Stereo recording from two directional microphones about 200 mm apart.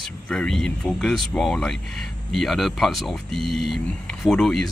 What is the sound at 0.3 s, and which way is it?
Speech, 5° left (ahead or behind).